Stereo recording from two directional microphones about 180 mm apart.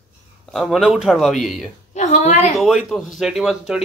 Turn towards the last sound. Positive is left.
turn(degrees=-5)  # may be behind; listen again after turning